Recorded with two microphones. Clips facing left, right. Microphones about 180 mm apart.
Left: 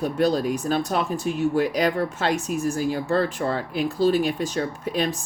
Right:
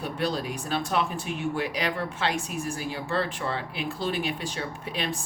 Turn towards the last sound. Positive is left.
turn(degrees=45)  # may be behind; listen again after turning